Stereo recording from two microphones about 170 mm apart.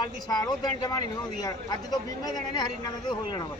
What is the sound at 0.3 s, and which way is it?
Speech, 20° left (ahead or behind).